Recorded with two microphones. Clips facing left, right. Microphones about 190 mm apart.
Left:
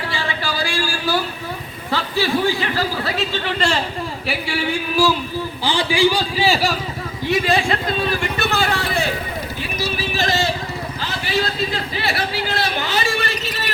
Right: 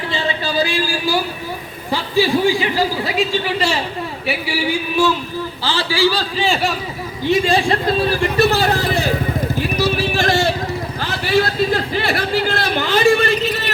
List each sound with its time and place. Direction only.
0.1 s a sound: 25° right (ahead or behind)
1.9 s a man's voice: 15° right (ahead or behind)
5.6 s a man's voice: 15° left (ahead or behind)
7.3 s speech: 30° right (ahead or behind)
9.6 s vehicle: 55° right (ahead or behind)
11.0 s a man's voice: 50° right (ahead or behind)